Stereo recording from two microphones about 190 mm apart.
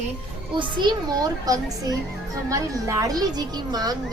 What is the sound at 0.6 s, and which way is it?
A child's voice, 25° right (ahead or behind).